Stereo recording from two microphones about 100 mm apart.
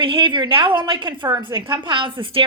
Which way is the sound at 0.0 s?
60° right (ahead or behind).